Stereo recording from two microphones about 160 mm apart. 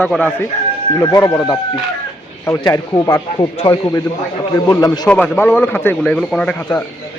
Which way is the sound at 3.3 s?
35° left (ahead or behind).